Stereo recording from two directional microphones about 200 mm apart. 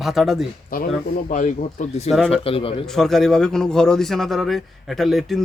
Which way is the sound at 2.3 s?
30° left (ahead or behind).